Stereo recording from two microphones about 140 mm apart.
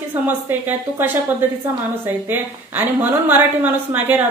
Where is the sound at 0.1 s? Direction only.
15° right (ahead or behind).